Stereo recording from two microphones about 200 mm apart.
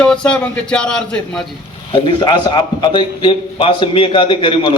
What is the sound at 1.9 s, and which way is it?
A man's voice, 25° left (ahead or behind).